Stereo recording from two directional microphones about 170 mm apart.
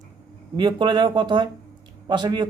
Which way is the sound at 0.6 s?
25° right (ahead or behind).